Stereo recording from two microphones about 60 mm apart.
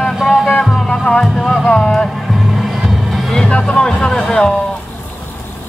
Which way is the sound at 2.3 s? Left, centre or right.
Centre.